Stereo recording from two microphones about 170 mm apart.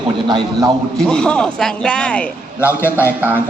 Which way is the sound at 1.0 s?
5° left (ahead or behind).